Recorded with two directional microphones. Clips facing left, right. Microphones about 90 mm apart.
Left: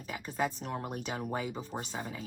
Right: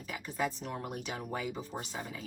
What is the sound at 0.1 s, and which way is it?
A woman's voice, 30° left (ahead or behind).